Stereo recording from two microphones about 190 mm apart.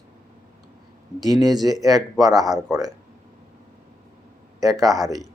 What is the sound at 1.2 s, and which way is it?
Speech, 20° right (ahead or behind).